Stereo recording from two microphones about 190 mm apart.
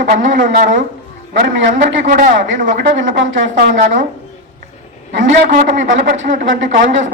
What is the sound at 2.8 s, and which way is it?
Speech, 75° right (ahead or behind).